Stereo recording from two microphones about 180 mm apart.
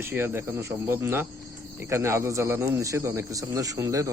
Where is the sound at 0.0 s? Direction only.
15° right (ahead or behind).